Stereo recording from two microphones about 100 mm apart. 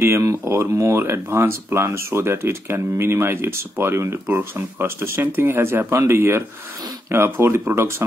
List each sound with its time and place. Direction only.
0.0 s speech: 30° right (ahead or behind)